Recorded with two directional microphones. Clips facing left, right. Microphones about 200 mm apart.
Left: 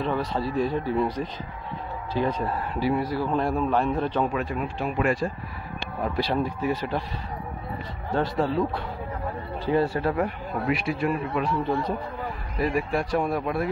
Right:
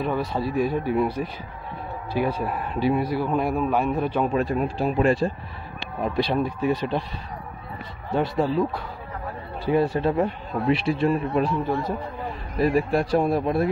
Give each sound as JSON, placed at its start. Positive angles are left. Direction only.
{"t": 0.0, "sound": "a man's voice", "side_deg": -10}
{"t": 4.3, "sound": "speech", "side_deg": -35}
{"t": 6.0, "sound": "speech", "side_deg": -20}
{"t": 8.1, "sound": "a man's voice", "side_deg": -10}
{"t": 9.7, "sound": "speech", "side_deg": -15}
{"t": 12.5, "sound": "speech", "side_deg": -30}